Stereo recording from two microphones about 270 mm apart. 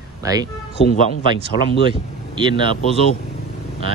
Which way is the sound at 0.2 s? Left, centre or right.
Centre.